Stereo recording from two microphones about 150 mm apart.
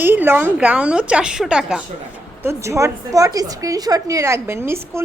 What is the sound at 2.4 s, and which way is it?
A woman's voice, 15° right (ahead or behind).